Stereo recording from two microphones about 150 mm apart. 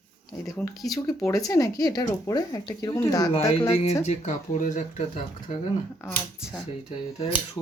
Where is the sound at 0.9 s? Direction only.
20° left (ahead or behind).